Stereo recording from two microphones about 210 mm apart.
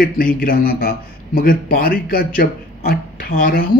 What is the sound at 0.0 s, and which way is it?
A man's voice, 45° left (ahead or behind).